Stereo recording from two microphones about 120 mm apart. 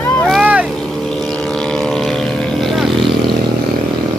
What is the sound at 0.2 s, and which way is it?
Boat, centre (ahead or behind).